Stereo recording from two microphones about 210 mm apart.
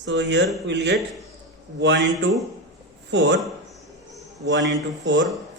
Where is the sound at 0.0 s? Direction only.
60° right (ahead or behind).